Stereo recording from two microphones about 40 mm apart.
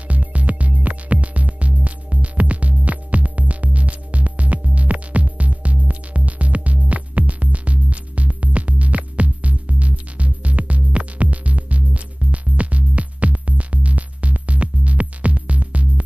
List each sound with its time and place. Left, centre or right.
0.1 s music: right